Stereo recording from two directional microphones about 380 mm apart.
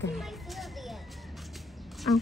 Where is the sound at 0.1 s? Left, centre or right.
Centre.